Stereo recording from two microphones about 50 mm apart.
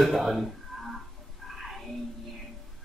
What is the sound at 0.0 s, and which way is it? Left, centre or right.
Speech, centre.